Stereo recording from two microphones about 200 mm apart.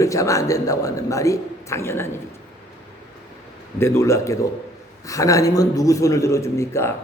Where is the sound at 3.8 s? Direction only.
15° left (ahead or behind).